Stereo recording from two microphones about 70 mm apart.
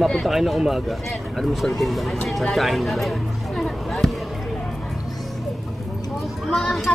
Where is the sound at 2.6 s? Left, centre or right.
Centre.